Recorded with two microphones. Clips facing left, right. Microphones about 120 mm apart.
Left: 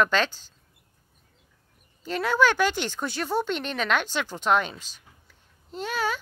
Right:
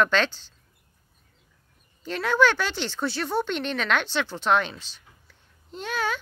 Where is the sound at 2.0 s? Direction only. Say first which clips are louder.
Right 1 dB; 5° left (ahead or behind).